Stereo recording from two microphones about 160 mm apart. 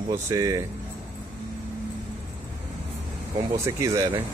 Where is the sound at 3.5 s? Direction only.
20° right (ahead or behind).